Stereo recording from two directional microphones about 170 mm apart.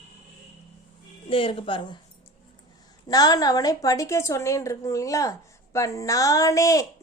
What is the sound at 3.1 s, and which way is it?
A woman's voice, 20° left (ahead or behind).